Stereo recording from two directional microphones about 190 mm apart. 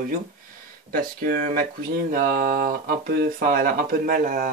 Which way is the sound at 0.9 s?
50° right (ahead or behind).